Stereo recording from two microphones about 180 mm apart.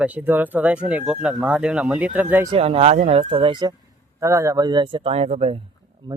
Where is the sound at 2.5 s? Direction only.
30° right (ahead or behind).